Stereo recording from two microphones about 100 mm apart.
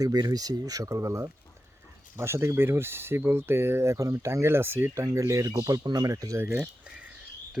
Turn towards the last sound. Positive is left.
turn(degrees=-15)  # may be behind; listen again after turning